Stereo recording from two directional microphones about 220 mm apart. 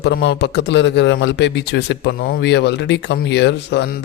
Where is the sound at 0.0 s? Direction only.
50° left (ahead or behind).